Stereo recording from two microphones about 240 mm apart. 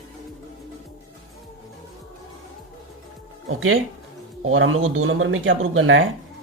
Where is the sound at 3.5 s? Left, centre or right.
Right.